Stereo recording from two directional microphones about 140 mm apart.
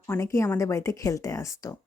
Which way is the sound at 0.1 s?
20° left (ahead or behind).